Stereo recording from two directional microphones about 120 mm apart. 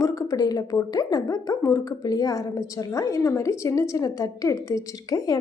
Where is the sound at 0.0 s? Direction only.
30° left (ahead or behind).